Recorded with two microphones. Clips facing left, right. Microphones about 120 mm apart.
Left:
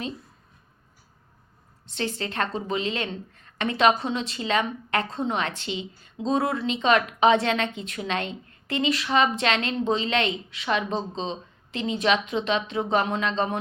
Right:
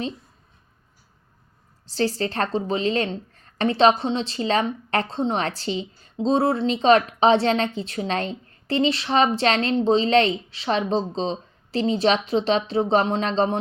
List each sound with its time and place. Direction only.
1.9 s a woman's voice: 35° right (ahead or behind)